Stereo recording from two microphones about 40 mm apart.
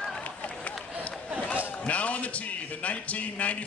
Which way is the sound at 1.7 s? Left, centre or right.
Left.